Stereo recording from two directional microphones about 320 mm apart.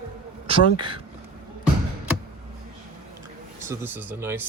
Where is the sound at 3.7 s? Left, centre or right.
Centre.